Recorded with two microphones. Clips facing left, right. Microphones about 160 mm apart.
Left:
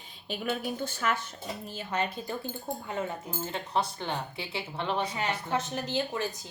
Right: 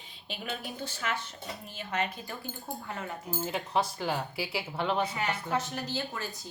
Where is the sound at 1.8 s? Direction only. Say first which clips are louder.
Left 1 dB; 35° left (ahead or behind).